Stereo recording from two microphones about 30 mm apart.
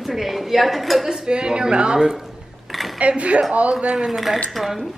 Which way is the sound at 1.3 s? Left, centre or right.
Right.